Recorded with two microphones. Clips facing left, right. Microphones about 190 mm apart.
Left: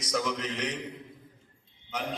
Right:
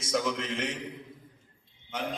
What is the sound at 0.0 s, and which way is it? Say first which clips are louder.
Speech: right 1 dB; 25° right (ahead or behind).